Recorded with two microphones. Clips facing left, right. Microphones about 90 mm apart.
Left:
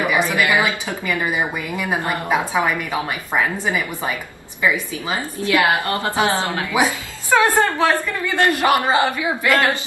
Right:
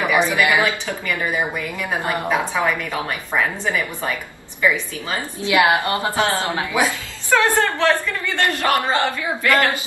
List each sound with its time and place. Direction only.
0.1 s a woman's voice: 20° right (ahead or behind)
0.6 s a woman's voice: 15° left (ahead or behind)
5.4 s a woman's voice: 20° right (ahead or behind)
6.1 s a woman's voice: 15° left (ahead or behind)
6.4 s a woman's voice: 20° right (ahead or behind)
6.7 s a woman's voice: 15° left (ahead or behind)